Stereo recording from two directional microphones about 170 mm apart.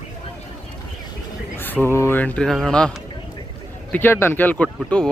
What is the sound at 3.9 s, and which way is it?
Speech, 15° left (ahead or behind).